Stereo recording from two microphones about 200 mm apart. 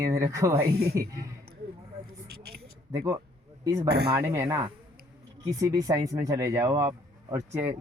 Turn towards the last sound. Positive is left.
turn(degrees=-10)  # may be behind; listen again after turning